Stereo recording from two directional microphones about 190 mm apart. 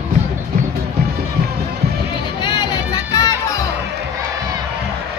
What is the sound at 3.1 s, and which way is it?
Crowd, 20° left (ahead or behind).